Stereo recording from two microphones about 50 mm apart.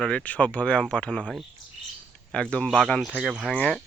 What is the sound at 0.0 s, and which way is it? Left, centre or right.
Speech, centre.